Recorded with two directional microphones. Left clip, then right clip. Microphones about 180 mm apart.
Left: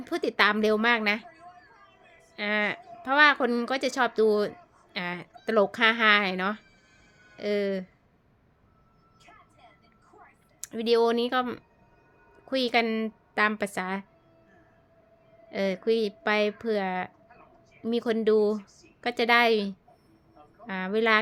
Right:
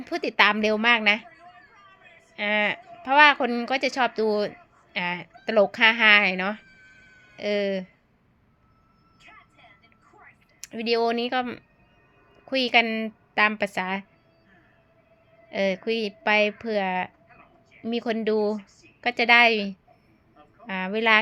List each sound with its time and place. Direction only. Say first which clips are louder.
0.0 s a woman's voice: right 3 dB; 15° left (ahead or behind)
2.3 s a woman's voice: right 4 dB; 15° left (ahead or behind)
10.6 s a woman's voice: left 1 dB; 15° left (ahead or behind)
15.4 s a woman's voice: right 1 dB; 15° left (ahead or behind)